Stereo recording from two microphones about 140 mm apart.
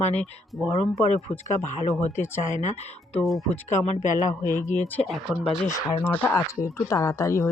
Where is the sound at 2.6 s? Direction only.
50° left (ahead or behind).